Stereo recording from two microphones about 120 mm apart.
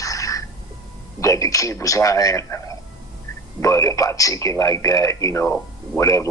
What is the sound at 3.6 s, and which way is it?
Speech, 25° left (ahead or behind).